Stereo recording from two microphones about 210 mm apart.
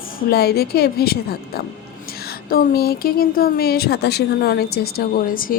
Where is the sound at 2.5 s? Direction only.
45° left (ahead or behind).